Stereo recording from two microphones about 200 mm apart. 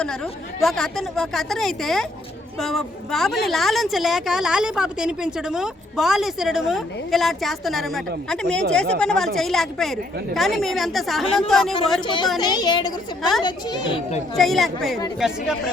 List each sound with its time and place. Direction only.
0.6 s a woman's voice: centre (ahead or behind)
12.0 s a child's voice: 25° left (ahead or behind)
14.3 s a woman's voice: centre (ahead or behind)